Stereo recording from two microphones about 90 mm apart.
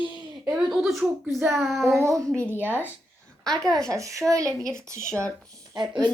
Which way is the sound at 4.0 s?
35° right (ahead or behind).